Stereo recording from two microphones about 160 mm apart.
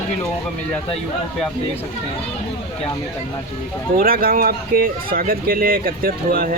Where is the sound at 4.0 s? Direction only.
65° right (ahead or behind).